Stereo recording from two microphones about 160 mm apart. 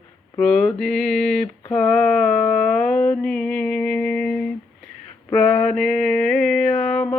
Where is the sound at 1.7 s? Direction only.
Centre (ahead or behind).